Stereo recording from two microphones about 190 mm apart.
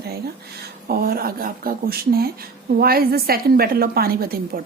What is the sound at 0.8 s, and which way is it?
A woman's voice, 55° right (ahead or behind).